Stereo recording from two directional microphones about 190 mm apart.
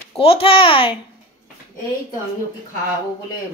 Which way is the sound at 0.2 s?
30° left (ahead or behind).